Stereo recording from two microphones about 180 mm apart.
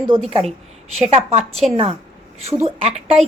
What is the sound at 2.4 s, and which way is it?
Speech, 35° right (ahead or behind).